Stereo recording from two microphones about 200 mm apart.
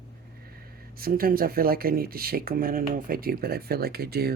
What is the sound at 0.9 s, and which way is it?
Speech, 45° right (ahead or behind).